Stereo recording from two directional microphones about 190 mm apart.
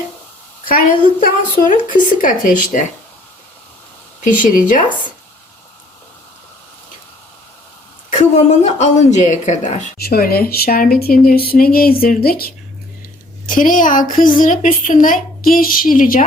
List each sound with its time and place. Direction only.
0.7 s a woman's voice: 45° left (ahead or behind)
4.2 s a woman's voice: 45° left (ahead or behind)
8.2 s a woman's voice: 40° left (ahead or behind)